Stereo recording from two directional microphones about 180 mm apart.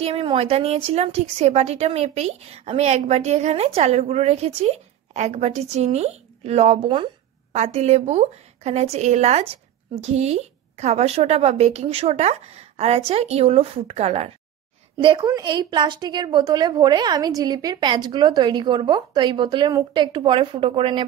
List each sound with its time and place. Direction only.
0.0 s a woman's voice: 30° right (ahead or behind)